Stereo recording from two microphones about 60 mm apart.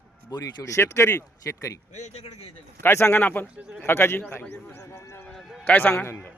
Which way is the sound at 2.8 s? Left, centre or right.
Left.